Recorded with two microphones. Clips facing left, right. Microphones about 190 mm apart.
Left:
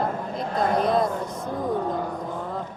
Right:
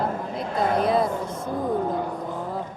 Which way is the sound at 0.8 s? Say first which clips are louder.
Even; 5° right (ahead or behind).